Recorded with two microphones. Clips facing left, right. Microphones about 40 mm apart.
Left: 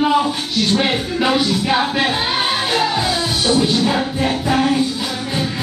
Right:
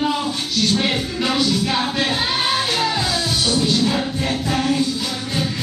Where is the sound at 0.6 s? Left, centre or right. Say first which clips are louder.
Left 2 dB; centre.